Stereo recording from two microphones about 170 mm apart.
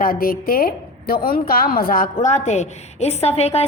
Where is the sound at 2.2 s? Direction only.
45° left (ahead or behind).